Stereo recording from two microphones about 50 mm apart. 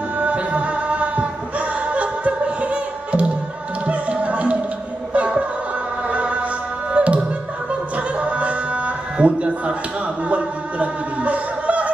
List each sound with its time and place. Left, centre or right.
0.2 s music: right
6.1 s chant: right
6.9 s music: right